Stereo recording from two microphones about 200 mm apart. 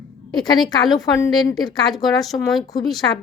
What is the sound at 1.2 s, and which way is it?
Speech, 15° left (ahead or behind).